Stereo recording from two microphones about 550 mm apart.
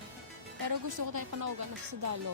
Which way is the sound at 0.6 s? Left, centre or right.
Right.